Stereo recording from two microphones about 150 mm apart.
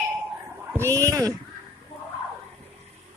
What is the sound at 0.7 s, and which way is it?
Speech, 20° right (ahead or behind).